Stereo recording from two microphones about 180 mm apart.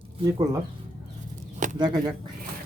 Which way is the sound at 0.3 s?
20° right (ahead or behind).